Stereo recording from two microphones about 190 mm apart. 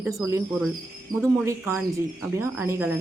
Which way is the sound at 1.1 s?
20° right (ahead or behind).